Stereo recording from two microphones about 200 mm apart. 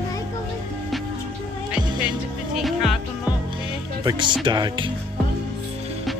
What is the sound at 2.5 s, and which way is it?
Music, centre (ahead or behind).